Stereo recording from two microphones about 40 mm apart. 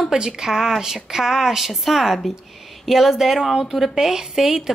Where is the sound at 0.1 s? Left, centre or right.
Centre.